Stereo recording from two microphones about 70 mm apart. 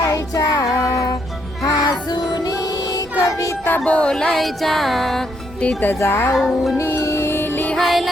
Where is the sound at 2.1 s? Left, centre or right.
Left.